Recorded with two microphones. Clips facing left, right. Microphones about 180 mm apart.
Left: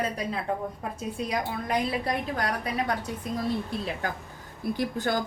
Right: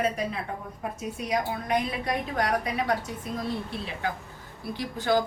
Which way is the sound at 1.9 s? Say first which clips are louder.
Left 1 dB; 30° left (ahead or behind).